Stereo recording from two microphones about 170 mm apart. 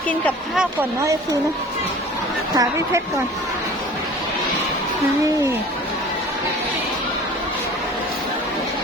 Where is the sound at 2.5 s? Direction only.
20° right (ahead or behind).